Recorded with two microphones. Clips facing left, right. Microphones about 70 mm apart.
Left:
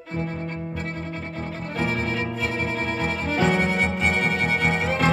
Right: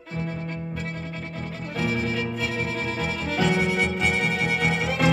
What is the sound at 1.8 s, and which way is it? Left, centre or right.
Music, left.